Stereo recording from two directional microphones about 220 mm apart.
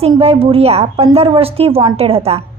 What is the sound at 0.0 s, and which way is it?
A woman's voice, 25° right (ahead or behind).